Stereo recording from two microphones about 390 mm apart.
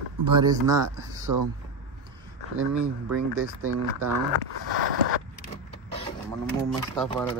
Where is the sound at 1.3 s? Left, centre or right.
Right.